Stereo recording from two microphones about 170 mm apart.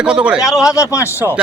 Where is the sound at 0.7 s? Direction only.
20° left (ahead or behind).